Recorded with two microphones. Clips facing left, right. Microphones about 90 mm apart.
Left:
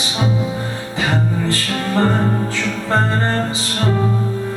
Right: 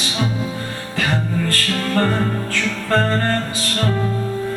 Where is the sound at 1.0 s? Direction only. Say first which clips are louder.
Left 1 dB; 20° left (ahead or behind).